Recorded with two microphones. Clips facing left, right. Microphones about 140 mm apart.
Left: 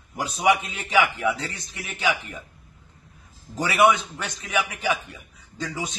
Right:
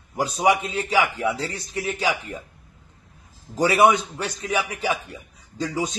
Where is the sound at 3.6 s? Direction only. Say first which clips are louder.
Right 2 dB; 35° right (ahead or behind).